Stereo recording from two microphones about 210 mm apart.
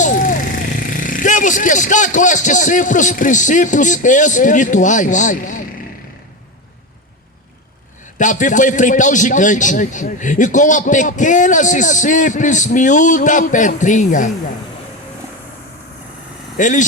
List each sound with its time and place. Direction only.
0.0 s speech: 40° left (ahead or behind)
8.2 s a man's voice: 35° left (ahead or behind)
16.6 s a man's voice: 35° left (ahead or behind)